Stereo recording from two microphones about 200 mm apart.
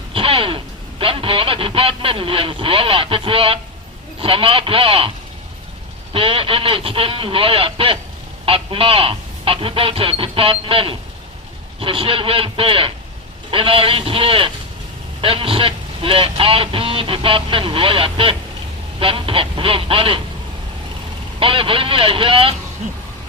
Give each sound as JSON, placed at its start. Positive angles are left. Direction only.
{"t": 0.1, "sound": "speech", "side_deg": -25}
{"t": 6.1, "sound": "speech", "side_deg": -25}
{"t": 21.3, "sound": "speech", "side_deg": -25}